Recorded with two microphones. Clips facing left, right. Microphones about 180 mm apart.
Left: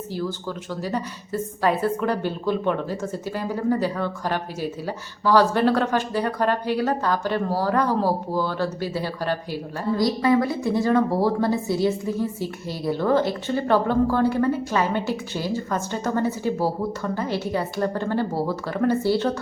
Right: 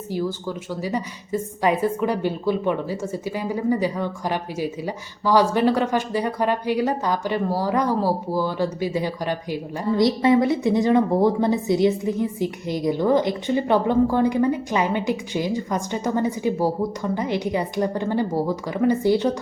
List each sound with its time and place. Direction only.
0.1 s a woman's voice: 10° right (ahead or behind)